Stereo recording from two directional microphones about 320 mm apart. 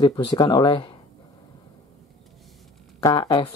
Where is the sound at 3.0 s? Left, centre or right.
Centre.